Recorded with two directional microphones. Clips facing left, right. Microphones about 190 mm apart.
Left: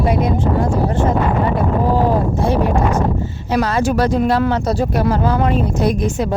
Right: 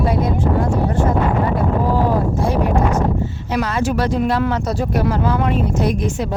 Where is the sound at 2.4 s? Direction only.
30° left (ahead or behind).